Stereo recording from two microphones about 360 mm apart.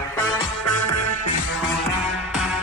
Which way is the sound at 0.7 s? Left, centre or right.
Left.